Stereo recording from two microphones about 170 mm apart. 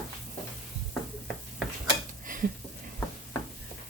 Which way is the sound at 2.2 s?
50° right (ahead or behind).